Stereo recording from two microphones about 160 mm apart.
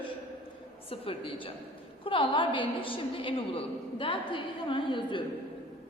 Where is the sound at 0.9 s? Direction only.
35° left (ahead or behind).